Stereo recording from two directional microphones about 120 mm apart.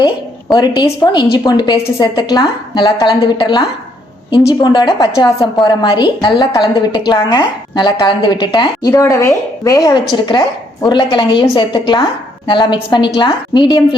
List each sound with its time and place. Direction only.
0.5 s a woman's voice: 35° left (ahead or behind)
8.9 s a woman's voice: 25° left (ahead or behind)